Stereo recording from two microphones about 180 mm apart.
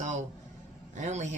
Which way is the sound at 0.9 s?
40° right (ahead or behind).